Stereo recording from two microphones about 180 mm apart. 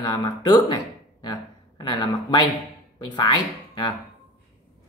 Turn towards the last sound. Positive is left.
turn(degrees=25)  # may be behind; listen again after turning